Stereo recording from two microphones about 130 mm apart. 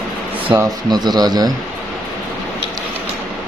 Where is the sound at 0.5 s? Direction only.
30° right (ahead or behind).